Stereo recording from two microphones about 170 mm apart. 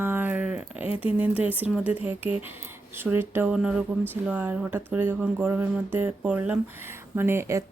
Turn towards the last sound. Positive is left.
turn(degrees=-15)  # may be behind; listen again after turning